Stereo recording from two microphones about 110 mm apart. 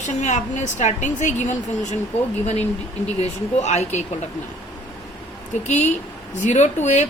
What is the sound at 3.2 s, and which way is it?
Speech, 85° left.